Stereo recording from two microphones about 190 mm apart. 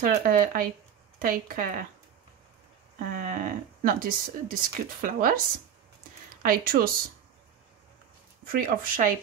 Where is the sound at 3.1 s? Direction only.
45° right (ahead or behind).